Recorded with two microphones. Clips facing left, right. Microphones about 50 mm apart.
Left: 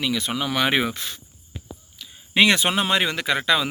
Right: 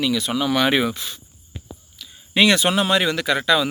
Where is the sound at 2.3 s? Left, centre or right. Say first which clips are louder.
Right 1 dB; left.